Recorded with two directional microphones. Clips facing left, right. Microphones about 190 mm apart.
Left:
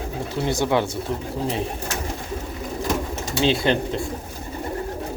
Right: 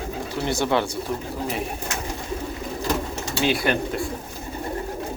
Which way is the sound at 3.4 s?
20° left (ahead or behind).